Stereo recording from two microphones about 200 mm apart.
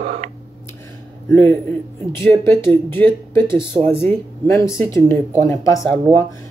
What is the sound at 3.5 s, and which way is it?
Speech, 25° right (ahead or behind).